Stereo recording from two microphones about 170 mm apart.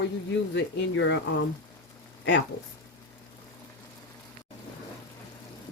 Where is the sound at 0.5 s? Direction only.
90° left.